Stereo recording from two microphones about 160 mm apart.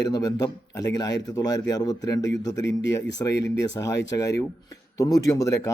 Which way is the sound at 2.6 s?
90° left.